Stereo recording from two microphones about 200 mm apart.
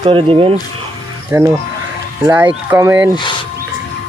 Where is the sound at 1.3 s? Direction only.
10° right (ahead or behind).